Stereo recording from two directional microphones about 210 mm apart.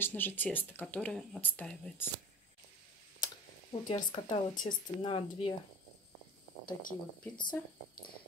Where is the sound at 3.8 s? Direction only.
20° left (ahead or behind).